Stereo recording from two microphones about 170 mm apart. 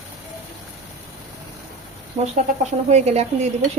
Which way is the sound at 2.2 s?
30° right (ahead or behind).